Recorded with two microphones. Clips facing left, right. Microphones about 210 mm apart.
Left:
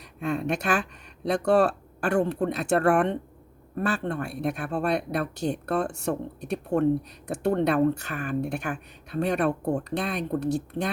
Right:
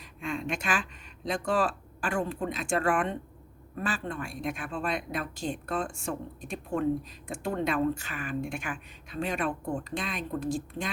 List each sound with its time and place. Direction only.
0.2 s speech: 60° left (ahead or behind)
8.6 s speech: 40° left (ahead or behind)
9.2 s speech: 65° left (ahead or behind)